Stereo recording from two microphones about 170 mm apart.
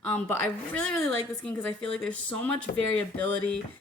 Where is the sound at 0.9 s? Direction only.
5° left (ahead or behind).